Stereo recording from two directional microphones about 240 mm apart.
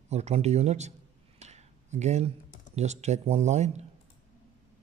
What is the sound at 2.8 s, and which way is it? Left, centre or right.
Speech, right.